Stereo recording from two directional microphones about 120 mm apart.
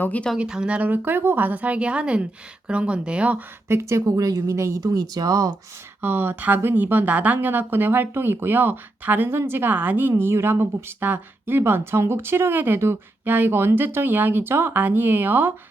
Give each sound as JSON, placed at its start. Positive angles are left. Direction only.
{"t": 0.0, "sound": "speech", "side_deg": 10}
{"t": 0.3, "sound": "speech", "side_deg": -5}
{"t": 6.0, "sound": "speech", "side_deg": -15}